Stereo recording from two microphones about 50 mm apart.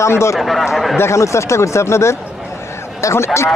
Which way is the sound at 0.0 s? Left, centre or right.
Left.